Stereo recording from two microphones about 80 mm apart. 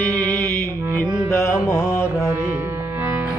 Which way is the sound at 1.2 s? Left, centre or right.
Left.